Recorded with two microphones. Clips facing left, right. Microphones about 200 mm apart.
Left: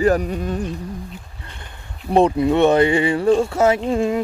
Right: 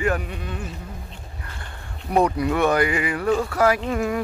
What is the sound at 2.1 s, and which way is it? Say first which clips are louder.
Speech: left 5 dB; 25° left (ahead or behind).